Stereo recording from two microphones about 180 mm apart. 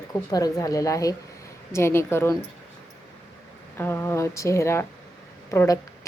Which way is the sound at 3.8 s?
10° left (ahead or behind).